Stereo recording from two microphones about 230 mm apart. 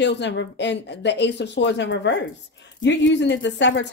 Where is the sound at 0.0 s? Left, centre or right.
Left.